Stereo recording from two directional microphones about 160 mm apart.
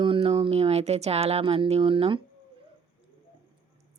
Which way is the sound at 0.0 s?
35° right (ahead or behind).